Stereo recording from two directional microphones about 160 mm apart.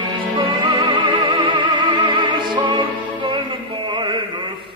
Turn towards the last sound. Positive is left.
turn(degrees=-30)  # may be behind; listen again after turning